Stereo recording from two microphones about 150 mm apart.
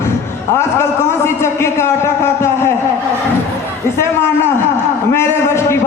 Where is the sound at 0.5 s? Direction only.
15° left (ahead or behind).